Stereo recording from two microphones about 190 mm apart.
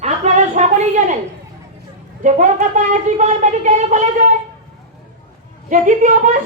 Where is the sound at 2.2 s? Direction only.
45° right (ahead or behind).